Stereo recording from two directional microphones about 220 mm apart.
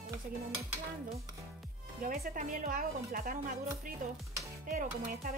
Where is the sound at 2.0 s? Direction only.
40° right (ahead or behind).